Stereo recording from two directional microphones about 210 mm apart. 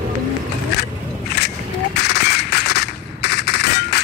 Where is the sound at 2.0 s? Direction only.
50° left (ahead or behind).